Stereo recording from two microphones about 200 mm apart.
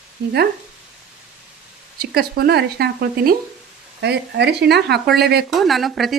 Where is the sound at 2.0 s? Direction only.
50° right (ahead or behind).